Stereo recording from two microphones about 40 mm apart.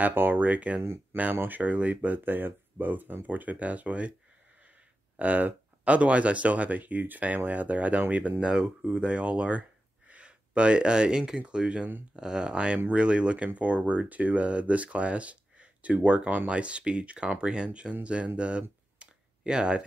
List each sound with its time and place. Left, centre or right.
0.1 s speech: right
0.4 s speech: right
1.1 s speech: right
1.5 s speech: right
5.1 s speech: right
10.2 s speech: right